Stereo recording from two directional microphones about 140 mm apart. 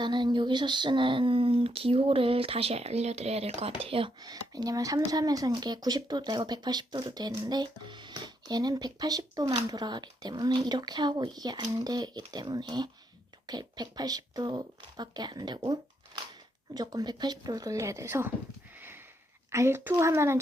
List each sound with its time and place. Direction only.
0.0 s speech: 35° right (ahead or behind)
4.2 s speech: 25° right (ahead or behind)
19.5 s a child's voice: 20° right (ahead or behind)